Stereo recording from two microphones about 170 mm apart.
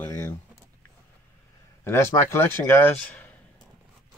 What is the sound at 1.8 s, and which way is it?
Speech, 15° left (ahead or behind).